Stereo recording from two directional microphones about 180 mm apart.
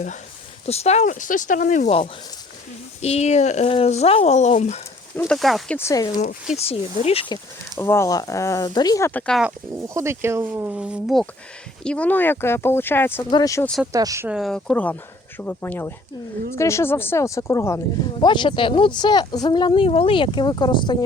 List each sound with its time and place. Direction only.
0.6 s speech: 35° left (ahead or behind)
5.2 s speech: centre (ahead or behind)
5.7 s speech: 15° left (ahead or behind)
6.7 s speech: 35° left (ahead or behind)
7.8 s speech: 15° left (ahead or behind)
9.7 s speech: 15° right (ahead or behind); by 13.7 s 20° left (ahead or behind)
13.9 s speech: 20° right (ahead or behind)
14.3 s speech: centre (ahead or behind); by 21.0 s 25° left (ahead or behind)